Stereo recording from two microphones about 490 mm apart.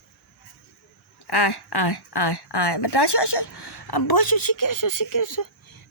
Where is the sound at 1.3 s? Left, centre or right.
Left.